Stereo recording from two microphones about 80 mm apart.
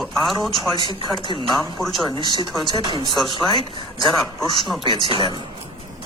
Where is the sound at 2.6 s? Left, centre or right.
Right.